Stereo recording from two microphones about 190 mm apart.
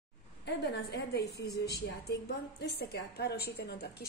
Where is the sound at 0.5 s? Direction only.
60° left (ahead or behind).